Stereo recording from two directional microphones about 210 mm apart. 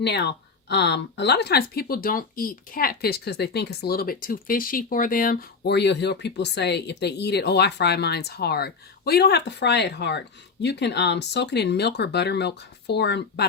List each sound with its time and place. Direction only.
0.0 s speech: 55° left (ahead or behind)